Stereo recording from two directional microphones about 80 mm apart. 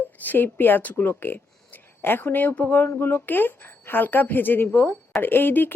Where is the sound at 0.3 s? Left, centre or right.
Left.